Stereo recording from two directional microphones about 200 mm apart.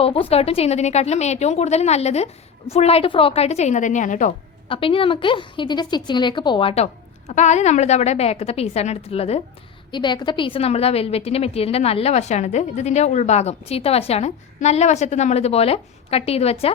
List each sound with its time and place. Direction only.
0.0 s a woman's voice: 30° left (ahead or behind)
4.7 s a woman's voice: 25° left (ahead or behind)